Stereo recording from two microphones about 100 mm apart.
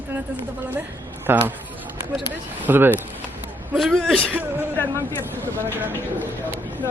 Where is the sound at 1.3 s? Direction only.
20° right (ahead or behind).